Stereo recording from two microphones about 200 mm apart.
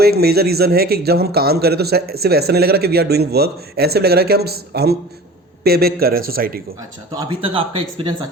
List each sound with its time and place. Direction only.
0.0 s a man's voice: 50° right (ahead or behind)
7.1 s speech: 20° right (ahead or behind)